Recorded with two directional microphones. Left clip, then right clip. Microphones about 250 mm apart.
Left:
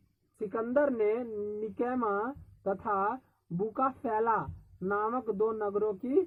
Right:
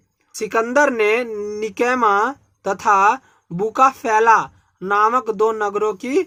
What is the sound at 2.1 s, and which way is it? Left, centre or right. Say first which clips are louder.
Speech: right 16 dB; right.